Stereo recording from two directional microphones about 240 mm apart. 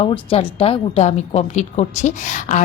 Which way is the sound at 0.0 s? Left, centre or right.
Left.